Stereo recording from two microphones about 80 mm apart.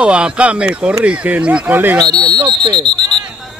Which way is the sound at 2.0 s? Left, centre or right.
Right.